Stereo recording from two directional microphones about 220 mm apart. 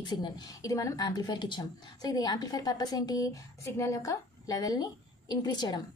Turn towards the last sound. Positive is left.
turn(degrees=20)  # may be behind; listen again after turning